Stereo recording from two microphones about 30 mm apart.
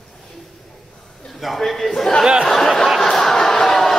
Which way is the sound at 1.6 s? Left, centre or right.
Centre.